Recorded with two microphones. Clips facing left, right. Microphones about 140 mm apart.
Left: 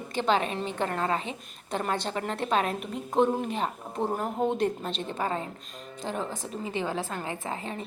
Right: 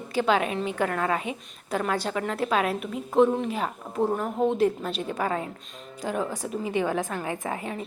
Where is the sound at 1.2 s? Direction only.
10° right (ahead or behind).